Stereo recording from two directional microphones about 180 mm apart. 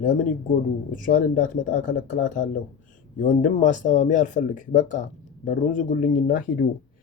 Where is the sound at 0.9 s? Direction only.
50° left (ahead or behind).